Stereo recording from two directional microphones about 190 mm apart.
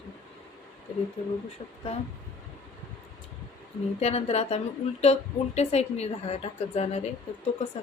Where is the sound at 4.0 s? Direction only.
35° left (ahead or behind).